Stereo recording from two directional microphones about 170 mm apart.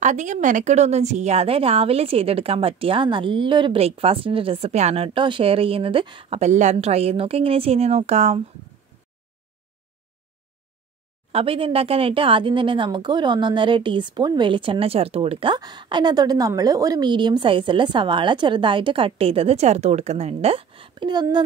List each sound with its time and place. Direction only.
0.0 s a woman's voice: 45° right (ahead or behind)
6.4 s a woman's voice: 45° right (ahead or behind)
11.3 s a woman's voice: 30° right (ahead or behind)